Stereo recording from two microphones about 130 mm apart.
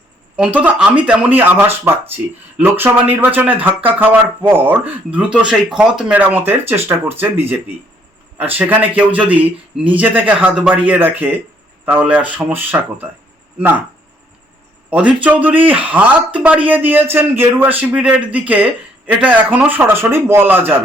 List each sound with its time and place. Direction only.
0.3 s a man's voice: 10° right (ahead or behind)
14.8 s a man's voice: 10° right (ahead or behind)